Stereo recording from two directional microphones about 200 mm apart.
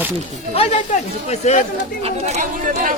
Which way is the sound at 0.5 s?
30° left (ahead or behind).